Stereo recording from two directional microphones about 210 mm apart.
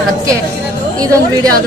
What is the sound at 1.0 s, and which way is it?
Speech, 15° right (ahead or behind).